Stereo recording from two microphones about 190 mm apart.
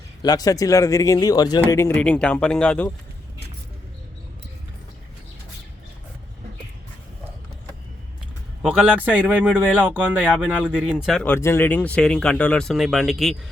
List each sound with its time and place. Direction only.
0.2 s speech: 20° left (ahead or behind)
8.6 s a man's voice: 5° right (ahead or behind)